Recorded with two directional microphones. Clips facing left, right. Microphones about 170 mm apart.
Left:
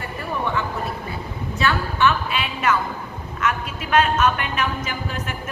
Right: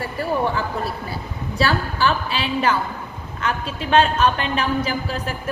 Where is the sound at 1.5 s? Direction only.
35° right (ahead or behind).